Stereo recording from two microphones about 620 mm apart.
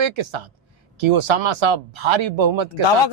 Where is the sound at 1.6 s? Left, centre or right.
Right.